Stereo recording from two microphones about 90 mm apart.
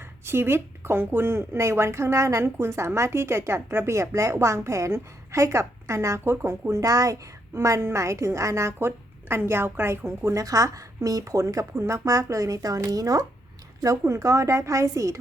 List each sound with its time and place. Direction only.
0.3 s a woman's voice: 25° right (ahead or behind)